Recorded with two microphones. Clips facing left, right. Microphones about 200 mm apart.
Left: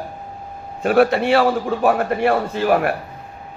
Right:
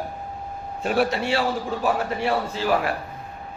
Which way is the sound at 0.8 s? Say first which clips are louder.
Left 7 dB; 60° left (ahead or behind).